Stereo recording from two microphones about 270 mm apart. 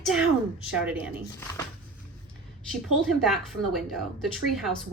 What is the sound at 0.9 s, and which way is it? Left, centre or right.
Speech, centre.